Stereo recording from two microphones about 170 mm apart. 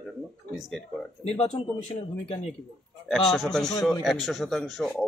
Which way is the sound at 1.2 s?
35° left (ahead or behind).